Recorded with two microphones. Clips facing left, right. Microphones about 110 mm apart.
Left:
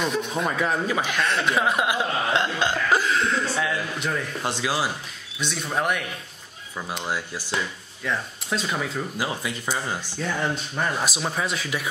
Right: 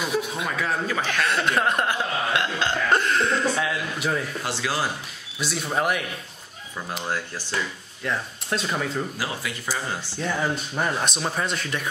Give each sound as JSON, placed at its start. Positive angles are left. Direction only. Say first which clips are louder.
{"t": 0.0, "sound": "speech", "louder": "left 1 dB", "side_deg": -5}
{"t": 0.5, "sound": "speech", "louder": "left 3 dB", "side_deg": 15}
{"t": 1.2, "sound": "speech", "louder": "right 1 dB", "side_deg": 0}
{"t": 2.3, "sound": "cough", "louder": "left 2 dB", "side_deg": 20}
{"t": 2.9, "sound": "speech", "louder": "right 2 dB", "side_deg": 0}
{"t": 4.4, "sound": "speech", "louder": "left 1 dB", "side_deg": 20}
{"t": 5.4, "sound": "speech", "louder": "right 1 dB", "side_deg": -5}
{"t": 7.1, "sound": "speech", "louder": "right 1 dB", "side_deg": 10}
{"t": 8.0, "sound": "speech", "louder": "even", "side_deg": 0}
{"t": 9.2, "sound": "cough", "louder": "left 2 dB", "side_deg": 25}
{"t": 10.2, "sound": "speech", "louder": "right 1 dB", "side_deg": -5}